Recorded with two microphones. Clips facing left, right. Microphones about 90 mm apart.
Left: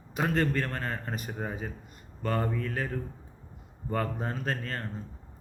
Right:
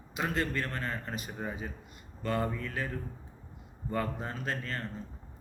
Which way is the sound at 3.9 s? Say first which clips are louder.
Left 2 dB; 40° left (ahead or behind).